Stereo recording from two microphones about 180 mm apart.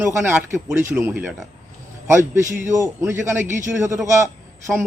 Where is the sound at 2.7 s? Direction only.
15° right (ahead or behind).